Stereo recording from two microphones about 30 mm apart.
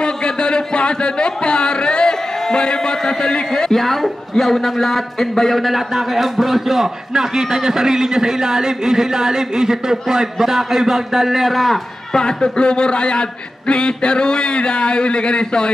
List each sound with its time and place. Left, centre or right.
0.0 s a sound: left
3.7 s a man's voice: centre
12.1 s a man's voice: left